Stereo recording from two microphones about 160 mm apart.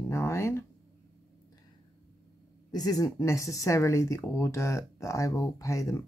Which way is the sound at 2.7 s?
25° left (ahead or behind).